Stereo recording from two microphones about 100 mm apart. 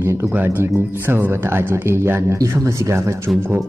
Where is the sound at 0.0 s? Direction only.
30° right (ahead or behind).